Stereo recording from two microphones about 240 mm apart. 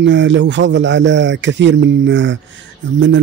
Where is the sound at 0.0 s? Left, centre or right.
Right.